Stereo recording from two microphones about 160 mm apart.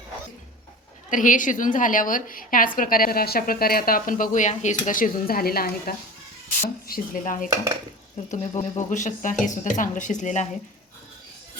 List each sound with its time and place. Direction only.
1.1 s a woman's voice: 55° left (ahead or behind)